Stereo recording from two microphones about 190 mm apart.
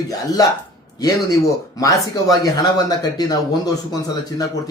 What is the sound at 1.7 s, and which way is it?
Speech, 20° left (ahead or behind).